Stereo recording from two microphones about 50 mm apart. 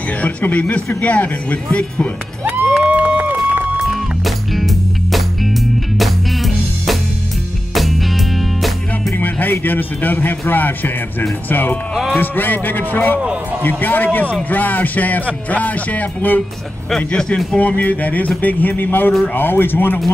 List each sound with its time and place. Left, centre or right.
0.2 s speech: left
2.8 s a sound: right
3.8 s music: centre
8.4 s music: centre
9.1 s music: left
11.9 s music: centre
12.2 s music: left
16.9 s speech: centre
17.6 s music: left
19.3 s speech: left